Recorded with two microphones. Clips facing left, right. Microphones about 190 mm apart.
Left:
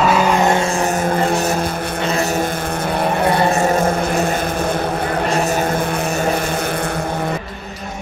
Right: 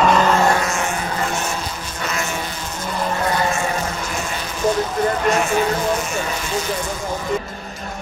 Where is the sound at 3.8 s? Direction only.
55° left (ahead or behind).